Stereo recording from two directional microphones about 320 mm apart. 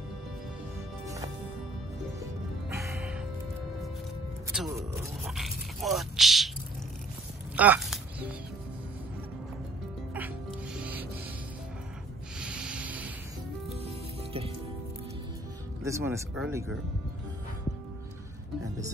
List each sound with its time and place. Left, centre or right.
1.0 s music: centre
2.7 s music: centre
4.6 s speech: centre
7.5 s a sound: centre
10.1 s music: centre
12.4 s sanding: centre
13.8 s music: centre
15.8 s speech: centre